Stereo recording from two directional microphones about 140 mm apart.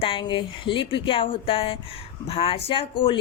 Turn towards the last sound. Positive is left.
turn(degrees=40)  # may be behind; listen again after turning